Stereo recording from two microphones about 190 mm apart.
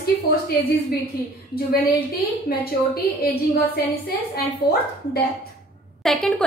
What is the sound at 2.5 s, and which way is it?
Speech, 50° left (ahead or behind).